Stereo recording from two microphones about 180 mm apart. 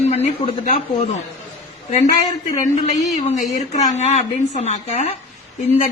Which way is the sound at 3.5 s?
40° left (ahead or behind).